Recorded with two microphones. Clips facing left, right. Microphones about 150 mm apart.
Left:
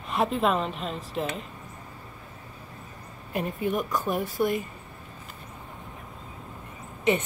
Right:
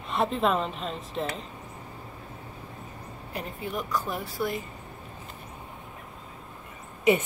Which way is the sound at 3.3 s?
20° left (ahead or behind).